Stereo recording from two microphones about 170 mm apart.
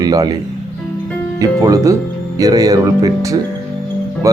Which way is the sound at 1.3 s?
20° right (ahead or behind).